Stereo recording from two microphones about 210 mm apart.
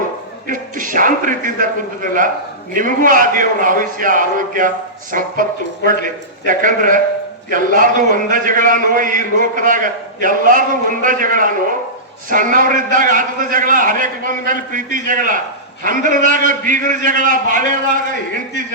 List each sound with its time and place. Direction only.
0.4 s a man's voice: 40° right (ahead or behind)